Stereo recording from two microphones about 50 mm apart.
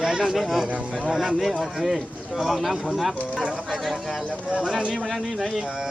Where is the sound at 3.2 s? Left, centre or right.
Centre.